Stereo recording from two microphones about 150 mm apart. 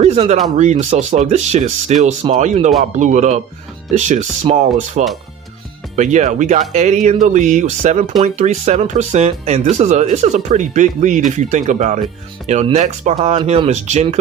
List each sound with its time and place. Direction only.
0.0 s speech: 45° right (ahead or behind)
13.1 s speech: 40° right (ahead or behind)